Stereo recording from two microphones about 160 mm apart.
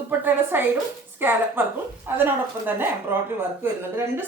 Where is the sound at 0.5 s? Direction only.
10° right (ahead or behind).